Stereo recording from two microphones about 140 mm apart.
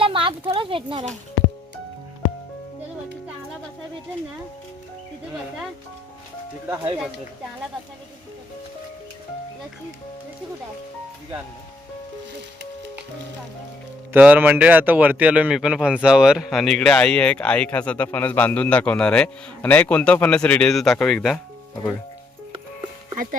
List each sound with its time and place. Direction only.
0.0 s a sound: 35° right (ahead or behind)
14.1 s speech: 10° right (ahead or behind); by 21.4 s 5° left (ahead or behind)
23.1 s speech: 75° right (ahead or behind)